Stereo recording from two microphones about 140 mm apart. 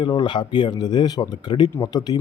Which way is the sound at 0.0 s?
35° left (ahead or behind).